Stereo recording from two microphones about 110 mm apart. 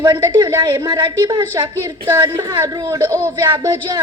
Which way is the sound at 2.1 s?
25° right (ahead or behind).